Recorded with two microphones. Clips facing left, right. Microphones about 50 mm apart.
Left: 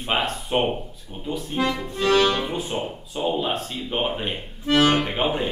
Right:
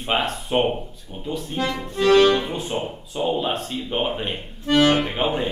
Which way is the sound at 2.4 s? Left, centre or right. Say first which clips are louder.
Even; centre.